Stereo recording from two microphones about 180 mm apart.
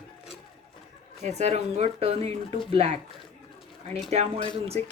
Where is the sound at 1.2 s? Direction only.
40° right (ahead or behind).